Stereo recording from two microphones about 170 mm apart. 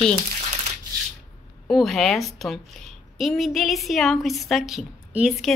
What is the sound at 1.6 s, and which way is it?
A woman's voice, centre (ahead or behind).